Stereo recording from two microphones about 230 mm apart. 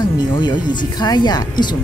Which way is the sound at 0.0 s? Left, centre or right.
Centre.